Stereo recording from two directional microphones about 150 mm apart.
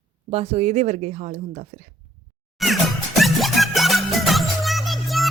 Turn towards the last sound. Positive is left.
turn(degrees=0)  # may be behind; listen again after turning